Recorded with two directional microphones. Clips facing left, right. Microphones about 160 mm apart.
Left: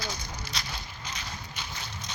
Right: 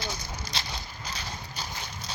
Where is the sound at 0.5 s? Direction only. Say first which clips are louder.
Right 2 dB; 30° right (ahead or behind).